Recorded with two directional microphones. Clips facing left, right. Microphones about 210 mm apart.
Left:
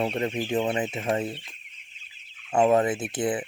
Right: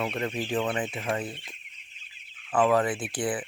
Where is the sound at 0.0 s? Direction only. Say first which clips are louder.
Left 3 dB; 25° left (ahead or behind).